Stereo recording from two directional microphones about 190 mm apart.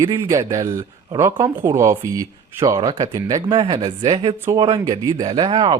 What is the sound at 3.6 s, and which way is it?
Speech, 30° right (ahead or behind).